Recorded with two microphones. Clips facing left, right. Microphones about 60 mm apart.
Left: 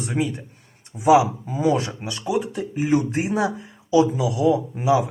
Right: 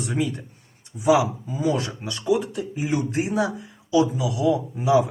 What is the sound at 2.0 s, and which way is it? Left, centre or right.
Speech, centre.